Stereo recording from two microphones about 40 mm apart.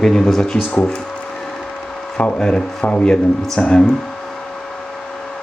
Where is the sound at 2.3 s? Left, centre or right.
Left.